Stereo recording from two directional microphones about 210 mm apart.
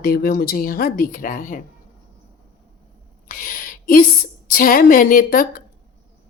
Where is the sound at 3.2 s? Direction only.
40° left (ahead or behind).